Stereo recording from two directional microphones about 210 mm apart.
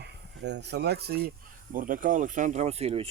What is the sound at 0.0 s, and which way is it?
Speech, 55° right (ahead or behind).